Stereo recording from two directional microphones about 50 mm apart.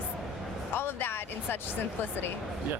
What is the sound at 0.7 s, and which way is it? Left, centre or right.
Speech, left.